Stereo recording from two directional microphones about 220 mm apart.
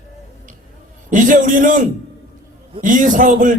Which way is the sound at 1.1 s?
35° right (ahead or behind).